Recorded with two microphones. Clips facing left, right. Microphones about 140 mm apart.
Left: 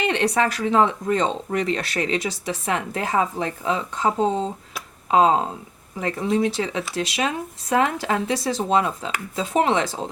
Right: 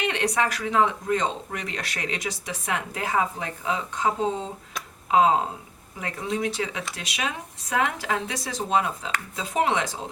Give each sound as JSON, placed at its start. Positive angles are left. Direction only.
{"t": 0.0, "sound": "speech", "side_deg": 30}